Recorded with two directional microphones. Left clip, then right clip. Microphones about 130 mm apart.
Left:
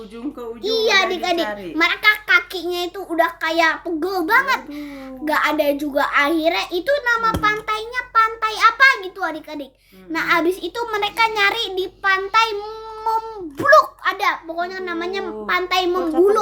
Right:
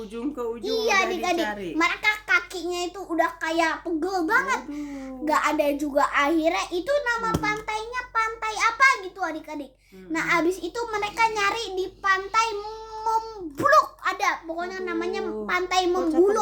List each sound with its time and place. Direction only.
0.6 s a child's voice: 25° left (ahead or behind)
5.2 s a child's voice: 25° left (ahead or behind)
13.6 s a child's voice: 15° left (ahead or behind)